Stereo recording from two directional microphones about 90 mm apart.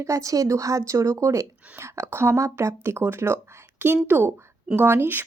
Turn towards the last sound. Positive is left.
turn(degrees=-25)  # may be behind; listen again after turning